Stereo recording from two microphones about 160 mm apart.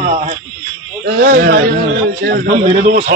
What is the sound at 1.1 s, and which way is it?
Speech, 80° right.